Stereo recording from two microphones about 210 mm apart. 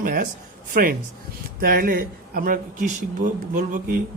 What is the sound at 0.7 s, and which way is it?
A man's voice, 40° right (ahead or behind).